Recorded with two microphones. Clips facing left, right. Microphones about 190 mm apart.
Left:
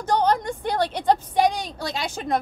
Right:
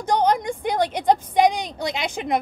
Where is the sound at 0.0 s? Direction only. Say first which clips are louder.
Right 1 dB; 15° right (ahead or behind).